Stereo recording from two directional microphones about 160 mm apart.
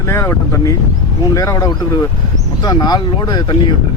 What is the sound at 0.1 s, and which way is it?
A man's voice, 20° left (ahead or behind).